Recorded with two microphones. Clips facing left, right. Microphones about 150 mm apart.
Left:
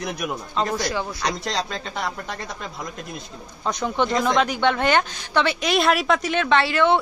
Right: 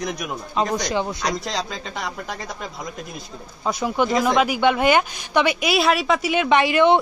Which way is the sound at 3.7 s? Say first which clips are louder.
Right 2 dB; 5° right (ahead or behind).